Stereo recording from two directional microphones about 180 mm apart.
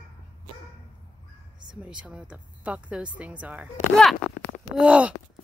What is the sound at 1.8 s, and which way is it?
Speech, 5° right (ahead or behind).